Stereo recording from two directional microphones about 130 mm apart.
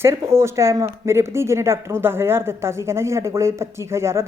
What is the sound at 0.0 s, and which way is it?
A woman's voice, 20° right (ahead or behind).